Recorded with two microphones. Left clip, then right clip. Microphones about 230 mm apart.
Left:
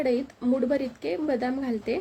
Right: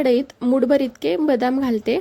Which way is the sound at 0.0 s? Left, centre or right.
Right.